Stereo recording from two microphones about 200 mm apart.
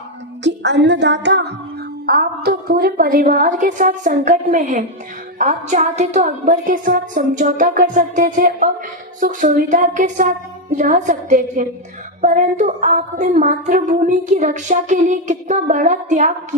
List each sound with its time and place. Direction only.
0.4 s female singing: 60° right (ahead or behind)
2.0 s a woman's voice: 50° right (ahead or behind)